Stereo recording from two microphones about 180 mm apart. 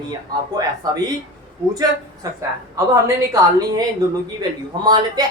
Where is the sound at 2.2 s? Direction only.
20° right (ahead or behind).